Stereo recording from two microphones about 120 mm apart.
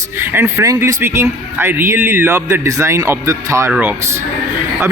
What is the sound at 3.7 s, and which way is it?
Speech, 15° right (ahead or behind).